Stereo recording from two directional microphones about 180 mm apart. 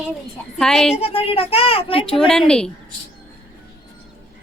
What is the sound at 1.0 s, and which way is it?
A child's voice, 30° left (ahead or behind).